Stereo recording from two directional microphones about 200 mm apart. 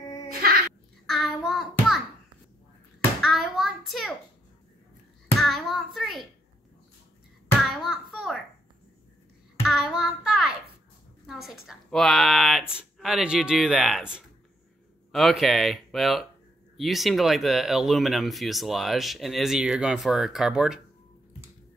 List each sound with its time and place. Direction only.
0.4 s babbling: 50° right (ahead or behind)
1.0 s child singing: centre (ahead or behind)
3.2 s hands: centre (ahead or behind)
5.4 s hands: centre (ahead or behind)
7.7 s a sound: centre (ahead or behind)
9.7 s child singing: centre (ahead or behind)
11.2 s speech: centre (ahead or behind)